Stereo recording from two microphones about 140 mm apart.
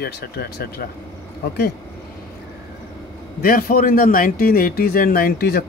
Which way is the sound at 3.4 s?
90° left.